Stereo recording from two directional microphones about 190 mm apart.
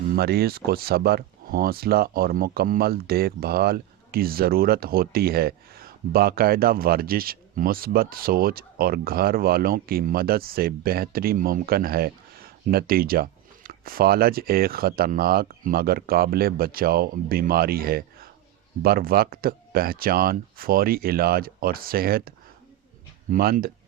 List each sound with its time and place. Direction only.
0.1 s speech: 55° right (ahead or behind)
23.3 s speech: 50° right (ahead or behind)